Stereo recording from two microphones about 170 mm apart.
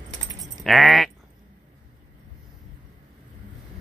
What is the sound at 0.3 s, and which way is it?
Keys jangling, 20° right (ahead or behind).